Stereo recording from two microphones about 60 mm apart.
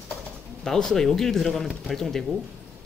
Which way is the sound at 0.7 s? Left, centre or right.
Centre.